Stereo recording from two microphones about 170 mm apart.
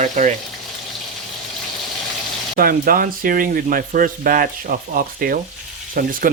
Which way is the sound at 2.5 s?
60° right (ahead or behind).